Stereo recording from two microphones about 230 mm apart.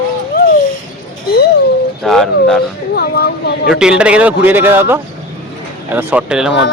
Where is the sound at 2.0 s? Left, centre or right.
Centre.